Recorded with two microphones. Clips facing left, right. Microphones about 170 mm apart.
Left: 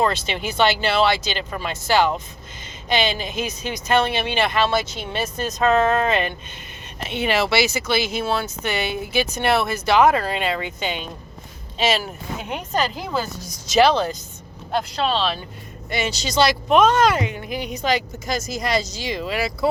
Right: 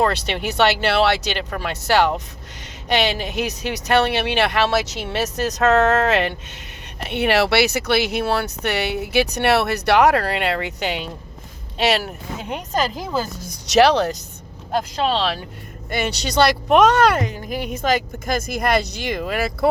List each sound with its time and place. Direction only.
0.0 s speech: 70° right (ahead or behind)
7.0 s speech: 65° right (ahead or behind)
13.4 s speech: 65° right (ahead or behind)
14.7 s speech: 40° right (ahead or behind)
15.9 s speech: 60° right (ahead or behind)
17.2 s a woman's voice: 40° right (ahead or behind)